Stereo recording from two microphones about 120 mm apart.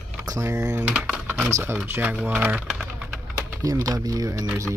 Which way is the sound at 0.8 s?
10° right (ahead or behind).